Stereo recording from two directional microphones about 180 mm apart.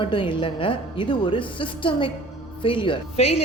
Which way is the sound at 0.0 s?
30° left (ahead or behind).